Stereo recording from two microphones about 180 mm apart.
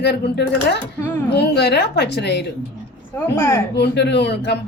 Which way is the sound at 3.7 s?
65° left (ahead or behind).